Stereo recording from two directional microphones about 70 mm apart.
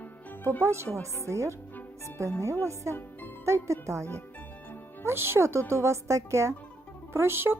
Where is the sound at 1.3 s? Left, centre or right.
Right.